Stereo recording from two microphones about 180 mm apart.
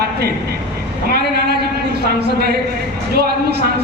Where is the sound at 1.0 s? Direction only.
60° right (ahead or behind).